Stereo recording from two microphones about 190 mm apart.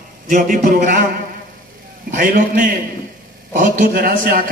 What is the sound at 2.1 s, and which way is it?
A man's voice, 45° right (ahead or behind).